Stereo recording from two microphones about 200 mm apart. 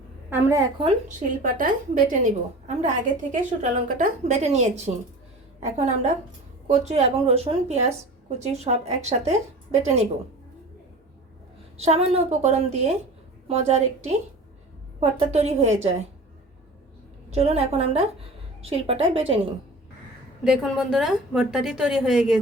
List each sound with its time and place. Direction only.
0.3 s a woman's voice: 10° right (ahead or behind)
0.8 s a woman's voice: 35° right (ahead or behind)
11.9 s a woman's voice: 30° right (ahead or behind)
15.3 s a woman's voice: 30° right (ahead or behind)
17.3 s a woman's voice: 30° right (ahead or behind)
20.4 s a woman's voice: 5° right (ahead or behind)